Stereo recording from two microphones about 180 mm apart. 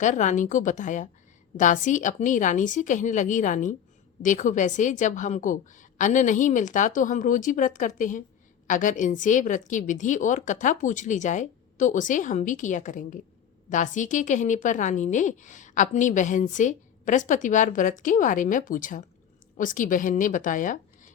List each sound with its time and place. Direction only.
0.0 s speech: 45° left (ahead or behind)